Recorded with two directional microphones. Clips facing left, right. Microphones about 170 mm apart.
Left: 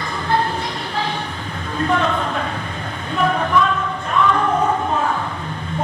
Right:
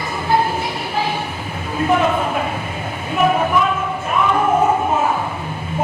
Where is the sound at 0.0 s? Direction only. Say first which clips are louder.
Right 2 dB; 10° right (ahead or behind).